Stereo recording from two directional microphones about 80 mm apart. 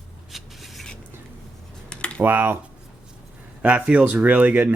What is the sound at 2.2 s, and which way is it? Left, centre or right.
Speech, right.